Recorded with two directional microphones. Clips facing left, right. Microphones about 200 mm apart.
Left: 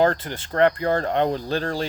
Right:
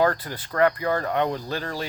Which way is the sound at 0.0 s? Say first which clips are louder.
Left 2 dB; 25° left (ahead or behind).